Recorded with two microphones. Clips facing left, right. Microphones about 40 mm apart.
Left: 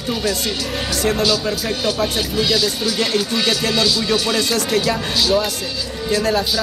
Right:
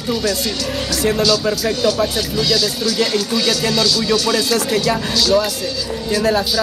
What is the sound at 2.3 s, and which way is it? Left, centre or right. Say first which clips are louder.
Speech: even; centre.